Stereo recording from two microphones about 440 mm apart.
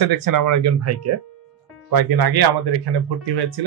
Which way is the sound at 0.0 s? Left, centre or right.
Right.